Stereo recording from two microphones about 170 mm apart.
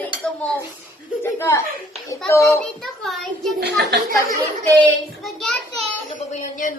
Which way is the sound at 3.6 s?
70° right (ahead or behind).